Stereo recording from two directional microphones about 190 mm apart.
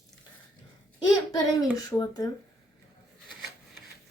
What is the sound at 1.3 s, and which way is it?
A child's voice, 20° left (ahead or behind).